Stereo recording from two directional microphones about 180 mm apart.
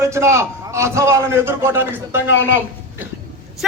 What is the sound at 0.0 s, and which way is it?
A man's voice, 15° right (ahead or behind).